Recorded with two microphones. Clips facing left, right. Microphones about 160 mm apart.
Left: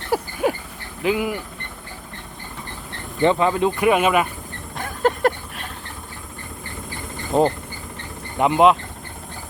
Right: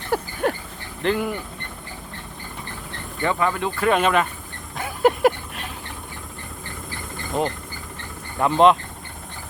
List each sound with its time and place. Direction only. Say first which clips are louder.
0.1 s a sound: left 1 dB; 10° left (ahead or behind)
1.0 s speech: left 1 dB; 5° left (ahead or behind)
3.2 s speech: left 5 dB; 20° left (ahead or behind)
4.8 s a sound: right 2 dB; 5° right (ahead or behind)
7.3 s speech: left 6 dB; 30° left (ahead or behind)
8.4 s speech: left 2 dB; 20° left (ahead or behind)